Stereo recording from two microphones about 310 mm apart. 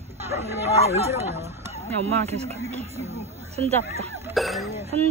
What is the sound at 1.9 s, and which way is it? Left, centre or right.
Speech, centre.